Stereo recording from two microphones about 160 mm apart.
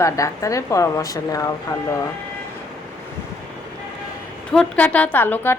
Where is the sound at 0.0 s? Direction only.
20° left (ahead or behind).